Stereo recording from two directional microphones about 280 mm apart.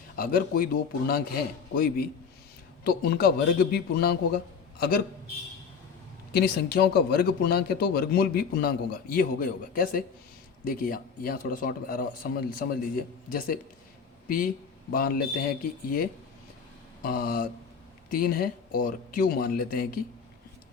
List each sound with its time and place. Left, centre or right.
0.2 s a man's voice: left
6.3 s a man's voice: left
14.3 s a man's voice: left